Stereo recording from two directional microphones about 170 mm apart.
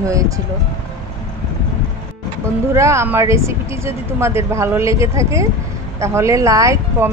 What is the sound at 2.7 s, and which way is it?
Speech, 15° right (ahead or behind).